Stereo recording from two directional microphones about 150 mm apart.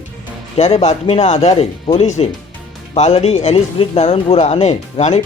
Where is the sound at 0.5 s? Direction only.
45° left (ahead or behind).